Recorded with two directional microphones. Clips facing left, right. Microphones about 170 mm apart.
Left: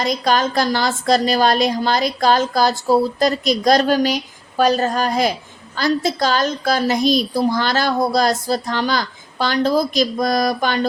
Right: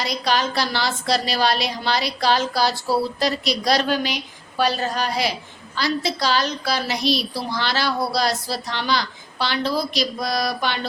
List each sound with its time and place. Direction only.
0.0 s a woman's voice: 45° left (ahead or behind)